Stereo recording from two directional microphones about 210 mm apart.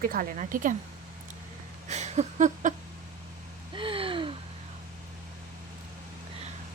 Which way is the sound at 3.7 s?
25° right (ahead or behind).